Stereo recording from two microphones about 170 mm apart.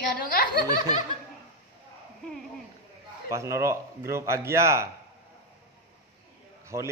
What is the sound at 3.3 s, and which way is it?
Speech, 15° right (ahead or behind).